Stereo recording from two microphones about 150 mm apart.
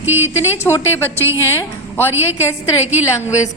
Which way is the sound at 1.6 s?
15° left (ahead or behind).